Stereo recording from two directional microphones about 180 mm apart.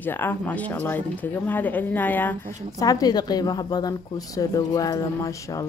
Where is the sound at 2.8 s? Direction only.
20° left (ahead or behind).